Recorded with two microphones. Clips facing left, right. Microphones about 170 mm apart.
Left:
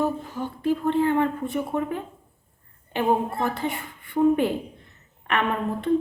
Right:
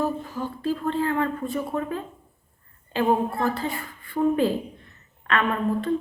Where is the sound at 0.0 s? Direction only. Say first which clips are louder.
Left 1 dB; 20° left (ahead or behind).